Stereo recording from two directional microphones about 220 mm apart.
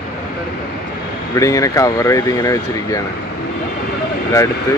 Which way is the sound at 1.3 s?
15° left (ahead or behind).